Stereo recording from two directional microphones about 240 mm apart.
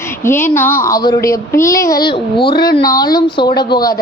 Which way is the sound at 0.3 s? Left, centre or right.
Centre.